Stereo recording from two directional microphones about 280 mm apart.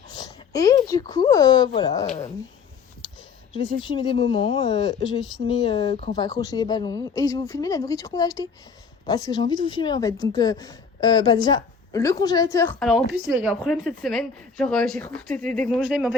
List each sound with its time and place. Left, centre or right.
0.1 s speech: centre
3.5 s a woman's voice: centre
5.0 s a woman's voice: centre
5.5 s a woman's voice: centre